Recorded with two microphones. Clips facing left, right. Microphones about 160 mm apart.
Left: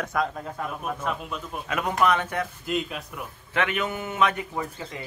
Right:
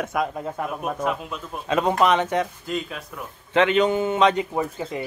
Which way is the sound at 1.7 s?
30° right (ahead or behind).